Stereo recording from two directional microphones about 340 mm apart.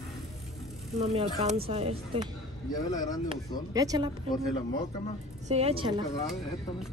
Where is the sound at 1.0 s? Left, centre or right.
Centre.